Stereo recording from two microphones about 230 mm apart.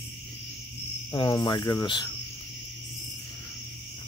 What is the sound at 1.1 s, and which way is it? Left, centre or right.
Cricket, centre.